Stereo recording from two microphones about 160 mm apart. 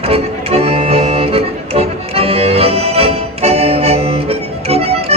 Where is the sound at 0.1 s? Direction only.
40° right (ahead or behind).